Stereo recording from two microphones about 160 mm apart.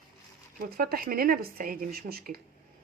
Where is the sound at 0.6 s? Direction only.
70° right (ahead or behind).